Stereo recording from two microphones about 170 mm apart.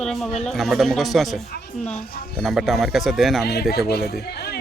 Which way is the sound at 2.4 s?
Centre (ahead or behind).